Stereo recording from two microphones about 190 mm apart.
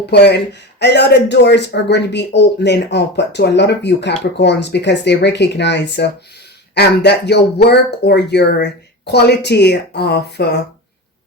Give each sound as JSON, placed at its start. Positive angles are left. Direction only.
{"t": 0.0, "sound": "speech", "side_deg": 60}